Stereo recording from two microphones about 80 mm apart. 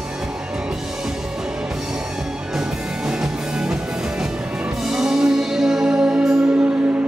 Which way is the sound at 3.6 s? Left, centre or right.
Centre.